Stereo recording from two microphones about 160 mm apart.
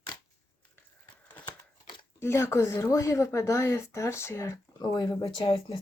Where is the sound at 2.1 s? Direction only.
15° left (ahead or behind).